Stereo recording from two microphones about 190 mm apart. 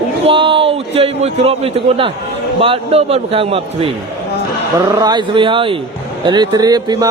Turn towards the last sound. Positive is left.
turn(degrees=-20)  # may be behind; listen again after turning